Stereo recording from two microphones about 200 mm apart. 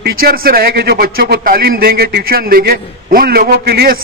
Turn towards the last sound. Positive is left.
turn(degrees=-50)  # may be behind; listen again after turning